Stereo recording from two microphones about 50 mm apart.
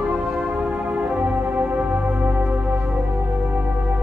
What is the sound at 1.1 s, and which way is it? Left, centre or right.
Organ, right.